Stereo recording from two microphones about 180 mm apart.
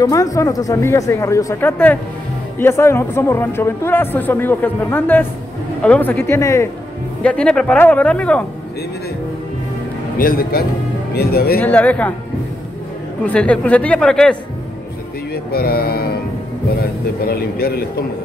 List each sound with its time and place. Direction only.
0.0 s a woman's voice: 20° left (ahead or behind)
7.2 s a woman's voice: 5° left (ahead or behind)
10.1 s a man's voice: 55° left (ahead or behind)
11.6 s a woman's voice: 10° left (ahead or behind)
13.2 s a woman's voice: 5° left (ahead or behind)
15.3 s speech: 60° left (ahead or behind)
17.2 s a man's voice: 55° left (ahead or behind)